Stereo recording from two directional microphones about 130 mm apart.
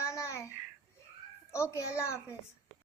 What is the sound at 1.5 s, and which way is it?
Child singing, 20° left (ahead or behind).